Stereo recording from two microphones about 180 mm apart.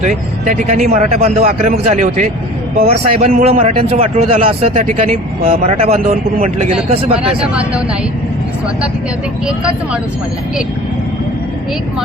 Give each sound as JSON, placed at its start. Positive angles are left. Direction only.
{"t": 0.0, "sound": "a man's voice", "side_deg": -40}
{"t": 7.3, "sound": "speech", "side_deg": -5}
{"t": 9.5, "sound": "speech", "side_deg": -5}